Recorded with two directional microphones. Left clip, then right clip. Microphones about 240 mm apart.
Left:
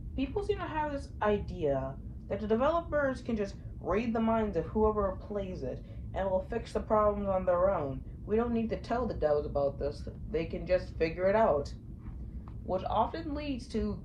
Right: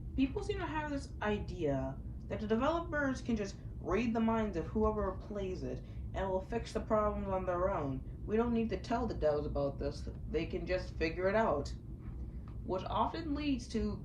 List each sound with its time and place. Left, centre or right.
0.2 s speech: left